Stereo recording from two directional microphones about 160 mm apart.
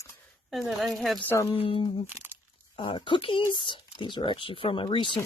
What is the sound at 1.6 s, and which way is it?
Speech, 30° left (ahead or behind).